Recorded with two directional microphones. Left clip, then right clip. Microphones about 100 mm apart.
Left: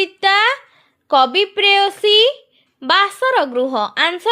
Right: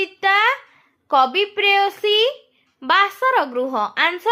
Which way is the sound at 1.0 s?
50° left (ahead or behind).